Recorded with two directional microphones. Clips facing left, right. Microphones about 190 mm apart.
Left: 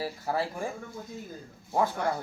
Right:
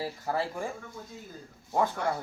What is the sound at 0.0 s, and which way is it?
Speech, 10° left (ahead or behind).